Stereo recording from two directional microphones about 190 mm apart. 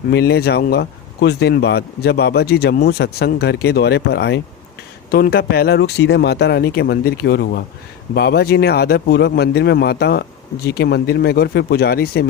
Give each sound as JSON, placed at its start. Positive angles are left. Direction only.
{"t": 0.1, "sound": "speech", "side_deg": 55}